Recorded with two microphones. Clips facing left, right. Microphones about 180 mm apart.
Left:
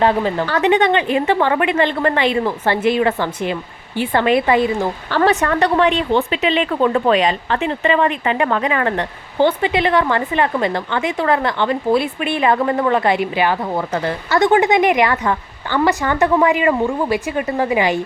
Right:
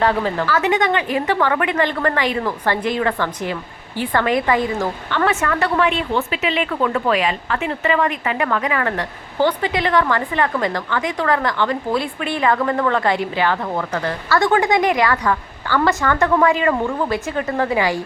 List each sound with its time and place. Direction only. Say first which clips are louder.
0.0 s a woman's voice: left 2 dB; 15° left (ahead or behind)
0.5 s a woman's voice: left 4 dB; 30° left (ahead or behind)
5.1 s a woman's voice: left 4 dB; 35° left (ahead or behind); by 18.0 s 20° left (ahead or behind)